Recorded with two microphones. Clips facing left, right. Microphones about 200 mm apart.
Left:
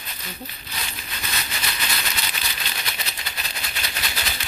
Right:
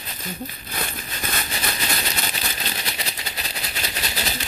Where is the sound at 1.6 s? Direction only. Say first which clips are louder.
Right 4 dB; 35° right (ahead or behind).